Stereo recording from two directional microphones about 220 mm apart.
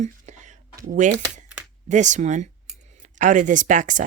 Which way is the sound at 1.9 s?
35° right (ahead or behind).